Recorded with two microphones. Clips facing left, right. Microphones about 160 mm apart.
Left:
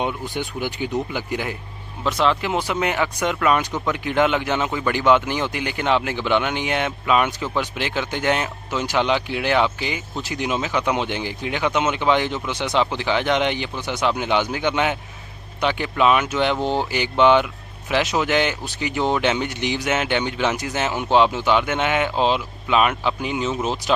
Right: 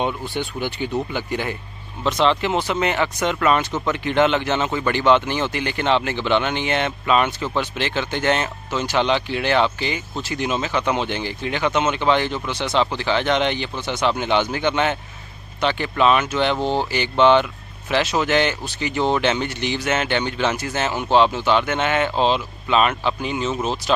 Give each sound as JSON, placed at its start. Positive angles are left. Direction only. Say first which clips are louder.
{"t": 0.0, "sound": "speech", "louder": "right 1 dB", "side_deg": 10}